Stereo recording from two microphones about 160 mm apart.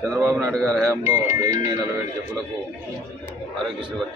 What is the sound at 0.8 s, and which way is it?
Speech, 20° right (ahead or behind).